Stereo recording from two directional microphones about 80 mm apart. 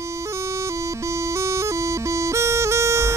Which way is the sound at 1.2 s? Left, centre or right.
Right.